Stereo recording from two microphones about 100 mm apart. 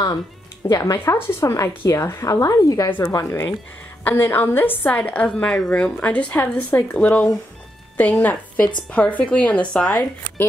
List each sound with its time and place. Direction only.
0.6 s a woman's voice: 30° left (ahead or behind)
4.0 s a woman's voice: 20° left (ahead or behind)